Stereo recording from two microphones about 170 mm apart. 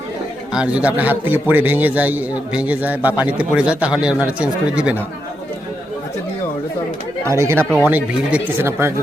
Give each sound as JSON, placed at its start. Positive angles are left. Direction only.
{"t": 0.5, "sound": "a man's voice", "side_deg": -5}
{"t": 7.3, "sound": "a man's voice", "side_deg": -15}